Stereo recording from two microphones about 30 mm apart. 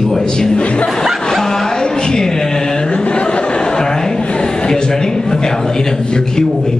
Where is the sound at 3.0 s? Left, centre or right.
Left; by 4.2 s centre.